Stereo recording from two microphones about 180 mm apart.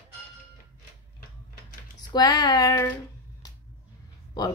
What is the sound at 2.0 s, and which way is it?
Speech, 25° left (ahead or behind).